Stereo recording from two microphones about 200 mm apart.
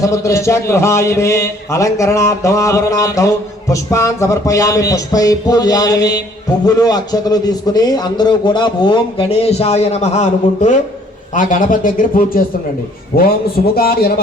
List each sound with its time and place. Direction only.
0.0 s a man's voice: 15° left (ahead or behind); by 12.4 s 45° left (ahead or behind)
13.7 s a man's voice: 50° left (ahead or behind)